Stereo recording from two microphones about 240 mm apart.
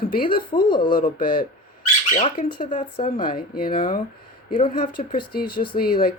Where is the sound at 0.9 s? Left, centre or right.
Left.